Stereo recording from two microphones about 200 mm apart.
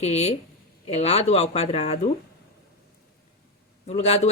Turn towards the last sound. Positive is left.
turn(degrees=30)  # may be behind; listen again after turning